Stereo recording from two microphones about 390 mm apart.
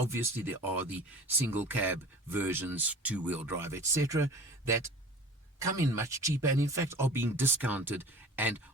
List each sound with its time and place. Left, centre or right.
0.1 s speech: centre